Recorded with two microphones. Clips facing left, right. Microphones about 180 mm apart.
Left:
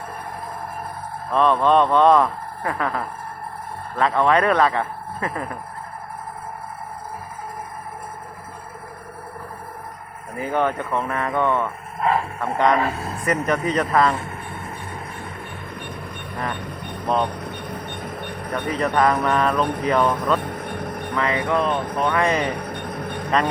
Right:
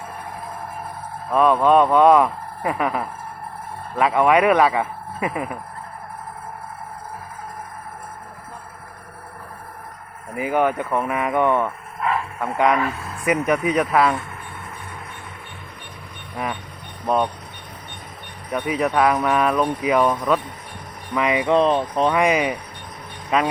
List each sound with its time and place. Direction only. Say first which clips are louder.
1.3 s speech: right 2 dB; 10° right (ahead or behind)
10.3 s speech: right 2 dB; 10° right (ahead or behind)
11.9 s speech: left 3 dB; 30° left (ahead or behind)
12.4 s speech: right 2 dB; 5° right (ahead or behind)
12.8 s speech: left 1 dB; 30° left (ahead or behind)
13.2 s speech: right 2 dB; 10° right (ahead or behind)
17.3 s vehicle: left 9 dB; 55° left (ahead or behind)
18.5 s speech: right 1 dB; 10° right (ahead or behind)
20.4 s vehicle: left 9 dB; 55° left (ahead or behind)
21.2 s speech: right 4 dB; 15° right (ahead or behind)
22.2 s speech: right 2 dB; 10° right (ahead or behind)
22.6 s music: left 9 dB; 55° left (ahead or behind)